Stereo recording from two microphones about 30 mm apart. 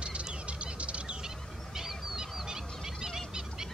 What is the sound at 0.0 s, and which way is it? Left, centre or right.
Bird, right.